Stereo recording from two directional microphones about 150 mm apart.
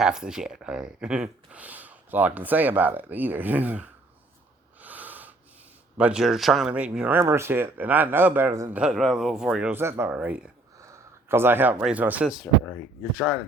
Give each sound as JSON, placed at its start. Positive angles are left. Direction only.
{"t": 0.0, "sound": "speech", "side_deg": -5}
{"t": 4.8, "sound": "snort", "side_deg": -10}
{"t": 6.0, "sound": "speech", "side_deg": -5}
{"t": 7.2, "sound": "speech", "side_deg": -20}
{"t": 10.8, "sound": "a sound", "side_deg": -20}
{"t": 11.8, "sound": "speech", "side_deg": -10}
{"t": 12.6, "sound": "speech", "side_deg": 10}